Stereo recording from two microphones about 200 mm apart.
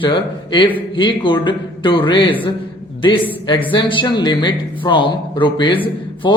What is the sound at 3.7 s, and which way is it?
Speech, 25° left (ahead or behind).